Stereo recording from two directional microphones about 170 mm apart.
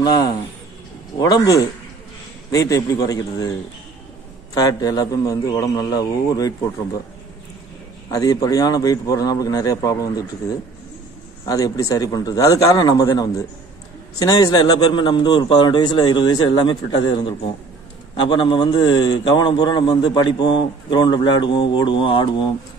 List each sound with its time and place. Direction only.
0.0 s a man's voice: 25° left (ahead or behind)
4.6 s a man's voice: 20° left (ahead or behind)
8.1 s a man's voice: 20° left (ahead or behind)
11.4 s a man's voice: 20° left (ahead or behind)